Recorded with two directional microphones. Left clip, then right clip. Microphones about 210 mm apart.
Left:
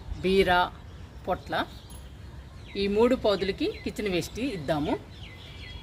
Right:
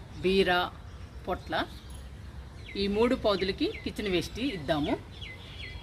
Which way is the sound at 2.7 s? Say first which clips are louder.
Left 4 dB; 25° left (ahead or behind).